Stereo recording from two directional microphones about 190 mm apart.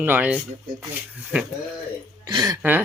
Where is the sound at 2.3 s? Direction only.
20° right (ahead or behind).